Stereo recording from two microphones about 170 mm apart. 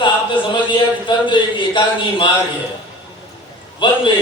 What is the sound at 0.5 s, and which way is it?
A man's voice, 30° left (ahead or behind).